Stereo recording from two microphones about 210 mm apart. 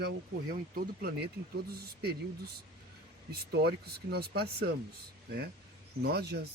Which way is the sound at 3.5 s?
50° right (ahead or behind).